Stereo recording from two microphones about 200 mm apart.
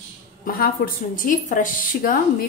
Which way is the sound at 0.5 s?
45° left (ahead or behind).